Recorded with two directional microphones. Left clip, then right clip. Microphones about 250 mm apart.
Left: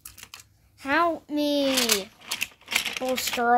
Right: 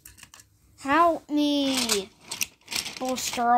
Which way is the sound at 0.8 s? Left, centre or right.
Centre.